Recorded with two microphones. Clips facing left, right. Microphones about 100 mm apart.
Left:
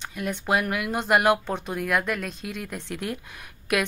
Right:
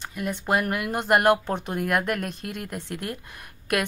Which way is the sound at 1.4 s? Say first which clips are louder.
Right 1 dB; 15° right (ahead or behind).